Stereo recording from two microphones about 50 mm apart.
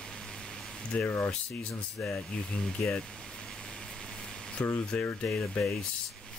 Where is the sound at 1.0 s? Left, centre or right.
Left.